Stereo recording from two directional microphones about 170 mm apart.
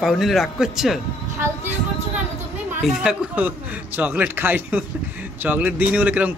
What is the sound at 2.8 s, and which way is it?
A man's voice, 5° right (ahead or behind).